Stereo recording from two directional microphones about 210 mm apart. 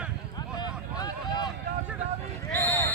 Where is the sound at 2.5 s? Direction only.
10° left (ahead or behind).